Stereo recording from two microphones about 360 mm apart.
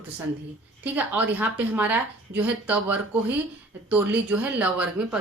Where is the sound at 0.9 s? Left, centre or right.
Centre.